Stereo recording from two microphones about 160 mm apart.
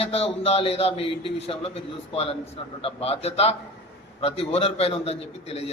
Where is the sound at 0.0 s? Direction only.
40° left (ahead or behind).